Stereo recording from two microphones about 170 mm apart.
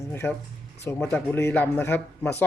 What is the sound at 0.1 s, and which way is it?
Speech, 15° left (ahead or behind).